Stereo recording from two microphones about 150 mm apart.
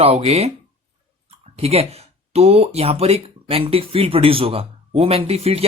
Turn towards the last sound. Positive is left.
turn(degrees=-40)  # may be behind; listen again after turning